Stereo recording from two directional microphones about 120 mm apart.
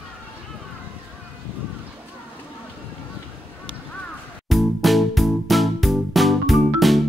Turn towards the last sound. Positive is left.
turn(degrees=0)  # may be behind; listen again after turning